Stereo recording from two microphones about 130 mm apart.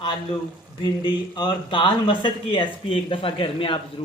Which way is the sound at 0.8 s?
35° left (ahead or behind).